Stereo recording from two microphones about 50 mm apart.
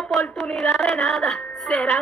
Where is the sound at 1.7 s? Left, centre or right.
Left.